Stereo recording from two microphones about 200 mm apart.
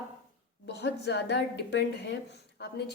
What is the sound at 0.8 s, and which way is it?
A woman's voice, 55° left (ahead or behind).